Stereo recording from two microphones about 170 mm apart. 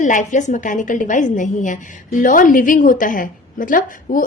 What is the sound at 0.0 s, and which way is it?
A woman's voice, 50° left (ahead or behind).